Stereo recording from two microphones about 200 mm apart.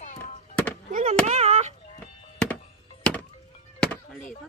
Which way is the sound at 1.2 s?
35° right (ahead or behind).